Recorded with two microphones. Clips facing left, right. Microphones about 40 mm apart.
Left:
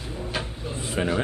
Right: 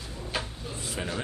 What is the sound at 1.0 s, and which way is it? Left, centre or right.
Speech, left.